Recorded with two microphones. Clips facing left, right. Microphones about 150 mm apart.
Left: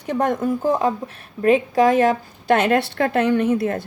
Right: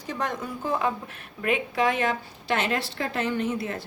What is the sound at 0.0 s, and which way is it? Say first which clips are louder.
A woman's voice: left 10 dB; 55° left (ahead or behind).